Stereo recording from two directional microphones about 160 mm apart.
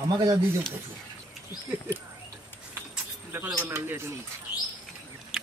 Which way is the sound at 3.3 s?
15° right (ahead or behind).